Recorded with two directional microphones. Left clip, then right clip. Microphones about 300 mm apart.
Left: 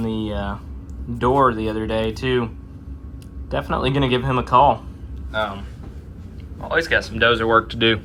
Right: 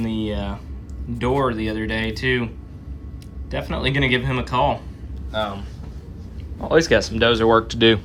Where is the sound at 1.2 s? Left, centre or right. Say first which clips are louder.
Left 4 dB; centre.